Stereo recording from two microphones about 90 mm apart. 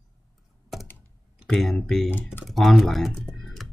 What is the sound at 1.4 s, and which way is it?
Speech, 5° left (ahead or behind).